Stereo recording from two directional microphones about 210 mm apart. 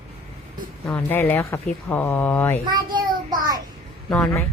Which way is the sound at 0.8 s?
10° left (ahead or behind).